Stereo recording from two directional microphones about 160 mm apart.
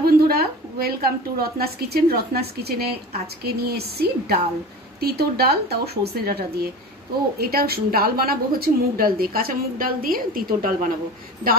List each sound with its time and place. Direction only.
0.0 s a woman's voice: 70° right (ahead or behind)